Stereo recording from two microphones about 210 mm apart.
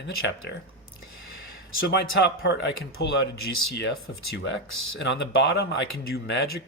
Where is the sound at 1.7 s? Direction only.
55° left (ahead or behind).